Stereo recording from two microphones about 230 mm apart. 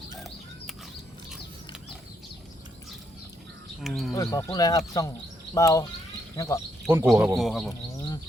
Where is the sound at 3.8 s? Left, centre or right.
Centre.